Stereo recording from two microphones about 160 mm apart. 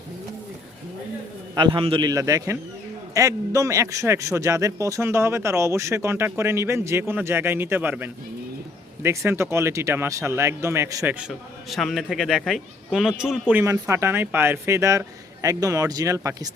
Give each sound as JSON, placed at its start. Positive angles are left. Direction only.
{"t": 1.5, "sound": "a man's voice", "side_deg": -30}
{"t": 11.7, "sound": "a man's voice", "side_deg": 0}